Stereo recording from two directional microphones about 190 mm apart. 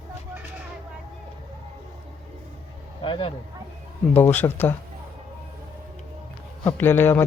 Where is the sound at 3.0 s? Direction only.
25° left (ahead or behind).